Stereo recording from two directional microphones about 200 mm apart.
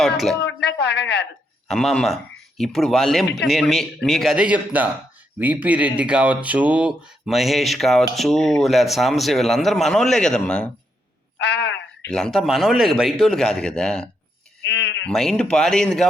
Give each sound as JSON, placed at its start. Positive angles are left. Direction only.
{"t": 0.0, "sound": "speech", "side_deg": 0}
{"t": 0.4, "sound": "speech", "side_deg": 60}
{"t": 1.6, "sound": "speech", "side_deg": 0}
{"t": 11.3, "sound": "telephone", "side_deg": 55}
{"t": 12.1, "sound": "speech", "side_deg": 0}
{"t": 14.6, "sound": "sheep", "side_deg": 60}
{"t": 15.0, "sound": "speech", "side_deg": 0}